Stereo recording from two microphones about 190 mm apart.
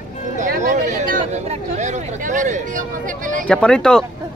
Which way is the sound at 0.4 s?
40° right (ahead or behind).